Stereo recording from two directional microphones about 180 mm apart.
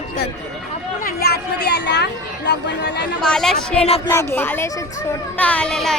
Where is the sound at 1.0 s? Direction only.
60° left (ahead or behind).